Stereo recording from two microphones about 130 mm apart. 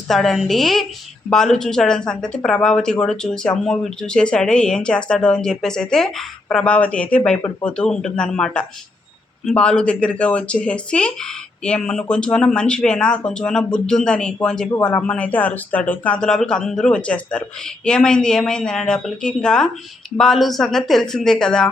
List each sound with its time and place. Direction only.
0.1 s speech: centre (ahead or behind)